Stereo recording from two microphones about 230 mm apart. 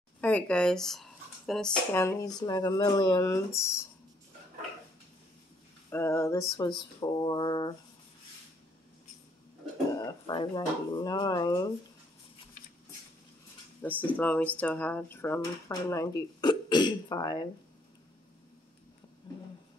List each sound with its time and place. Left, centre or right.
0.2 s speech: centre
5.9 s speech: centre
9.9 s a sound: centre
11.1 s speech: centre
13.8 s speech: centre